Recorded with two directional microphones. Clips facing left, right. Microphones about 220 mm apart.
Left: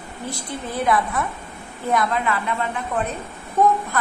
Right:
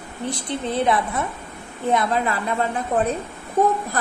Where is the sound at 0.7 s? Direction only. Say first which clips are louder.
Even; 25° right (ahead or behind).